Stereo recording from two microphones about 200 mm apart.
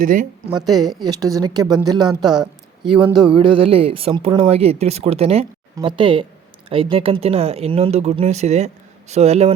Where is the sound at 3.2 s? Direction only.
25° right (ahead or behind).